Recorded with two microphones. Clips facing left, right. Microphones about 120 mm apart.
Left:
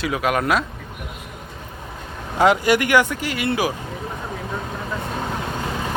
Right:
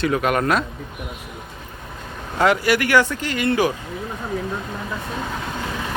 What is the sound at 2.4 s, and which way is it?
Speech, 20° left (ahead or behind).